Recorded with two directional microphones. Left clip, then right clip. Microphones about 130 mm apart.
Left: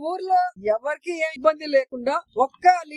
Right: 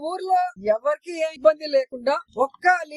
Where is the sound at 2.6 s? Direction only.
50° left (ahead or behind).